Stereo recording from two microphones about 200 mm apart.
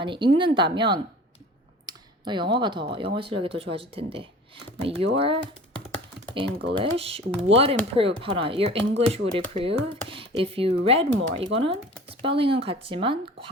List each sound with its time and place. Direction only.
0.0 s speech: 25° right (ahead or behind)
1.9 s computer keyboard: 20° right (ahead or behind)
3.2 s speech: 25° right (ahead or behind)
6.7 s speech: 30° right (ahead or behind)